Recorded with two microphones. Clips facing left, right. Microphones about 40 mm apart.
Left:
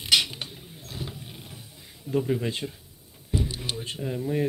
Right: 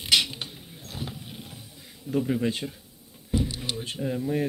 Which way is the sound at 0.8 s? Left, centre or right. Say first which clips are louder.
Right 1 dB; right.